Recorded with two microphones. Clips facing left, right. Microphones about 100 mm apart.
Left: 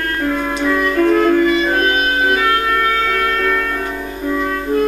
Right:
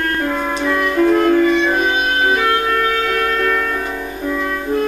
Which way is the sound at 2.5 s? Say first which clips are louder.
Even; 15° right (ahead or behind).